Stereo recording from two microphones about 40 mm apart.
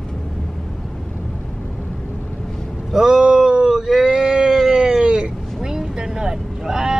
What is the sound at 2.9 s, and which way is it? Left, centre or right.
Vehicle, centre.